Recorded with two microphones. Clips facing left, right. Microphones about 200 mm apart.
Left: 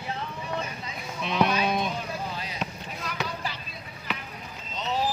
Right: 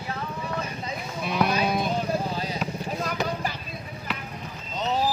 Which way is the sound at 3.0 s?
45° right (ahead or behind).